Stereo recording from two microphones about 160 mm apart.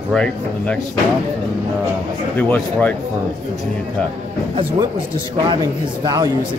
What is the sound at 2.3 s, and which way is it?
Speech, 10° left (ahead or behind).